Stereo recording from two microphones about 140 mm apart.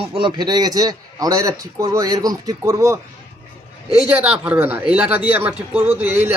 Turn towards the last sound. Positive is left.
turn(degrees=-15)  # may be behind; listen again after turning